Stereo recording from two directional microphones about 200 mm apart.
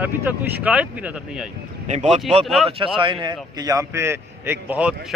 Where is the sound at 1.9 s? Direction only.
35° right (ahead or behind).